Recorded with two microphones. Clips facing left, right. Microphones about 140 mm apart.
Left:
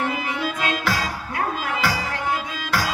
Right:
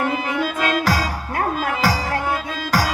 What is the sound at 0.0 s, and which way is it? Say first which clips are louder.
Music: right 3 dB; 45° right (ahead or behind).